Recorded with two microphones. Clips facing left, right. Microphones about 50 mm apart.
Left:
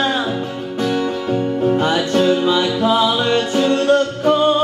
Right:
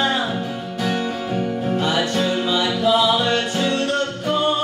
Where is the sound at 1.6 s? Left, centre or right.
Left.